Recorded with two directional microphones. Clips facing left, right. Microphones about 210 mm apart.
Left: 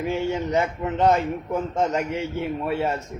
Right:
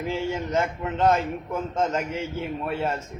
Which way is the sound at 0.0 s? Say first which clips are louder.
Left 3 dB; 15° left (ahead or behind).